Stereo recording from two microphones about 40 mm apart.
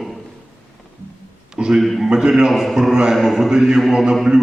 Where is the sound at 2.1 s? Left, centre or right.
Centre.